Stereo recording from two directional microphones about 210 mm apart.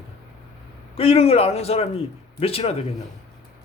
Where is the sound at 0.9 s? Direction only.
25° left (ahead or behind).